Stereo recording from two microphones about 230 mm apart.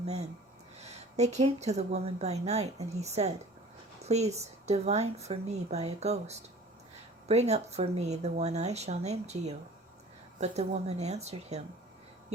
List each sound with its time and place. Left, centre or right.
0.0 s a woman's voice: right